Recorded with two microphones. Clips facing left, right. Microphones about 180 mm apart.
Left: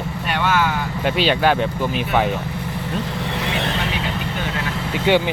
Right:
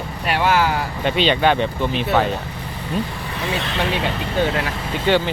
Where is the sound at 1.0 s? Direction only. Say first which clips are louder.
Even; 5° left (ahead or behind).